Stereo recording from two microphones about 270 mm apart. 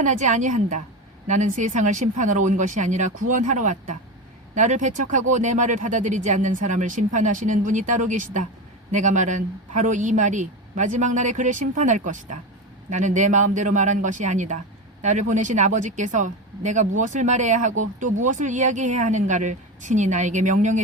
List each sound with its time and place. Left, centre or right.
0.0 s speech: right